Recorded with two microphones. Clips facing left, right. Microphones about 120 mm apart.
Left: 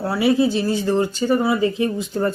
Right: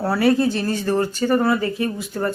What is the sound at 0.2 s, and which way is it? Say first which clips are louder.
Speech: left 2 dB; 10° left (ahead or behind).